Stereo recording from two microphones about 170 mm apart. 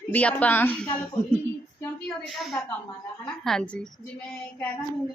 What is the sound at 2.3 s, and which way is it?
Speech, centre (ahead or behind).